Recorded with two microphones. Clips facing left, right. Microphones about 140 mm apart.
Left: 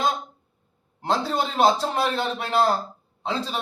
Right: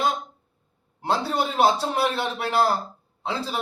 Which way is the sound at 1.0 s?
10° right (ahead or behind).